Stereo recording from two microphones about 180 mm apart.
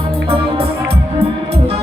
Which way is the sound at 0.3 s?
30° right (ahead or behind).